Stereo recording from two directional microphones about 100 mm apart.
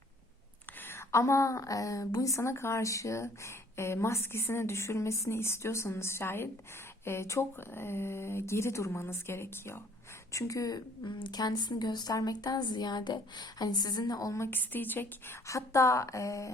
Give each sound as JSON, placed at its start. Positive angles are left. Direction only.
{"t": 0.8, "sound": "a woman's voice", "side_deg": 25}
{"t": 15.4, "sound": "a woman's voice", "side_deg": 30}